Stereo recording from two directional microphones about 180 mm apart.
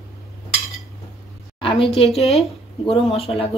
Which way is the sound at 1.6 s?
30° left (ahead or behind).